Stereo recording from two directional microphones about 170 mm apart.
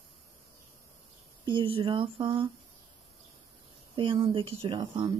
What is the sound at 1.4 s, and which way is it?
A woman's voice, 30° right (ahead or behind).